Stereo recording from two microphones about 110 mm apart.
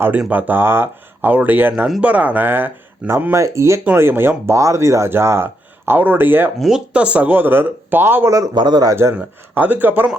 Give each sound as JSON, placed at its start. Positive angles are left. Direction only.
{"t": 0.2, "sound": "speech", "side_deg": -15}
{"t": 3.3, "sound": "speech", "side_deg": -25}
{"t": 6.6, "sound": "speech", "side_deg": -5}
{"t": 8.4, "sound": "a man's voice", "side_deg": -40}
{"t": 8.9, "sound": "speech", "side_deg": -25}
{"t": 9.1, "sound": "speech", "side_deg": -15}